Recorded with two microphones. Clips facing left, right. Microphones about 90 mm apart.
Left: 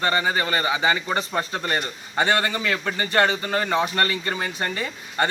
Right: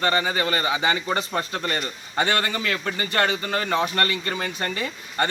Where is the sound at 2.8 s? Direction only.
10° left (ahead or behind).